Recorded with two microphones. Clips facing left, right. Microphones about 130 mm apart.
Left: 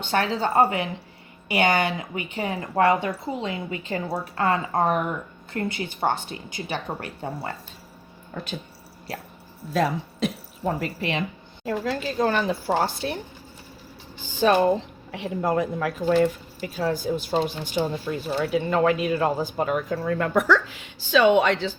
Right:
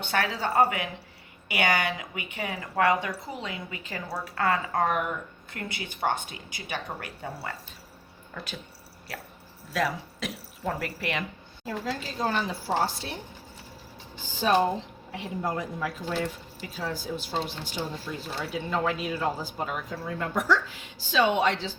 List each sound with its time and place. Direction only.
0.1 s a woman's voice: 25° left (ahead or behind)
9.7 s speech: 30° left (ahead or behind)
11.6 s speech: 60° left (ahead or behind)
15.1 s speech: 75° left (ahead or behind)
16.7 s speech: 55° left (ahead or behind)